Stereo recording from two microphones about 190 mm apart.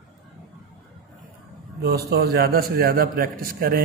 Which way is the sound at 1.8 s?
55° right (ahead or behind).